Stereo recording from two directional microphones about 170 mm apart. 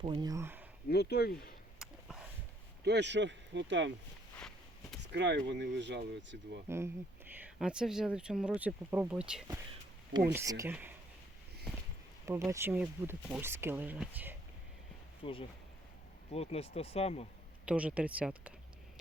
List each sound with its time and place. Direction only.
0.0 s speech: 30° right (ahead or behind); by 0.7 s 10° right (ahead or behind)
0.9 s speech: 70° left (ahead or behind)
2.8 s speech: 90° right
4.4 s walk: 5° left (ahead or behind)
5.1 s speech: 90° right
6.7 s speech: 15° right (ahead or behind)
7.6 s speech: 5° right (ahead or behind)
10.3 s speech: 20° right (ahead or behind)
12.5 s speech: 15° right (ahead or behind)
15.2 s speech: 30° left (ahead or behind)
17.7 s speech: 10° right (ahead or behind)